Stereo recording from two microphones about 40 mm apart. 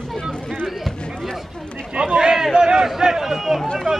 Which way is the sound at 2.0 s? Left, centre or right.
Centre.